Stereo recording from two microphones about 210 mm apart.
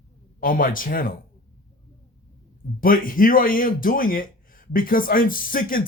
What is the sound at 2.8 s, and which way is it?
A man's voice, 40° left (ahead or behind).